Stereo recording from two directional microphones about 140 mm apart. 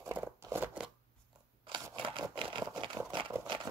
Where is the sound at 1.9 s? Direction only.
35° right (ahead or behind).